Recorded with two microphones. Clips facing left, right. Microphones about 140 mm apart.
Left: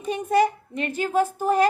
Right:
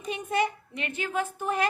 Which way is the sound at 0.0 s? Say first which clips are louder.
Left 7 dB; 40° left (ahead or behind).